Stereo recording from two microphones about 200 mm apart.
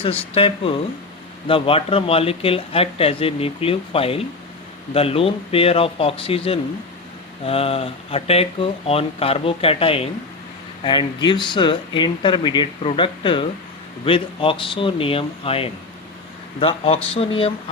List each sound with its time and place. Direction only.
0.3 s speech: 25° left (ahead or behind)